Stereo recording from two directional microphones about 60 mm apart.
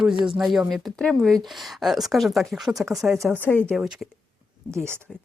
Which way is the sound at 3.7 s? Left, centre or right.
Centre.